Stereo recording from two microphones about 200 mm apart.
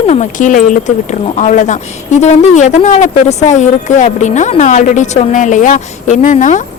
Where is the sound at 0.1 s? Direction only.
40° left (ahead or behind).